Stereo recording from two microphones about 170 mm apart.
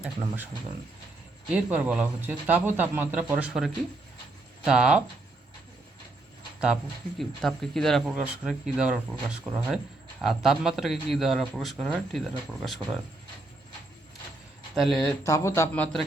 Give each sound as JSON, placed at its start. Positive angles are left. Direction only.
{"t": 1.5, "sound": "speech", "side_deg": -10}
{"t": 7.2, "sound": "speech", "side_deg": 0}
{"t": 14.8, "sound": "speech", "side_deg": 0}
{"t": 15.2, "sound": "a man's voice", "side_deg": 15}